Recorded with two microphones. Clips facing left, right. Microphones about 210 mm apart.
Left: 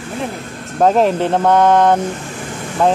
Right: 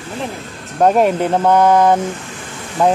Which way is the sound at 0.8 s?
5° right (ahead or behind).